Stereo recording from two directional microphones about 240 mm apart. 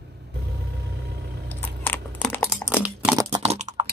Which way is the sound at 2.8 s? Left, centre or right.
Centre.